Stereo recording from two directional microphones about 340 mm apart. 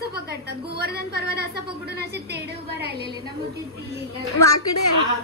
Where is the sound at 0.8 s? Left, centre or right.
Right.